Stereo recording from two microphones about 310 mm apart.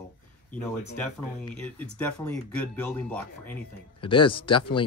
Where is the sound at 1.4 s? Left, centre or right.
Centre.